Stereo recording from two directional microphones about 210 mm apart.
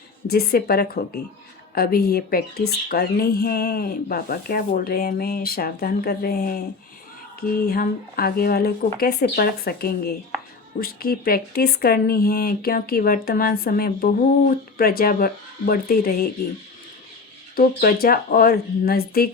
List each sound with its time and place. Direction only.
0.3 s a woman's voice: 50° left (ahead or behind)
7.6 s a woman's voice: 45° left (ahead or behind)
17.6 s a woman's voice: 45° left (ahead or behind)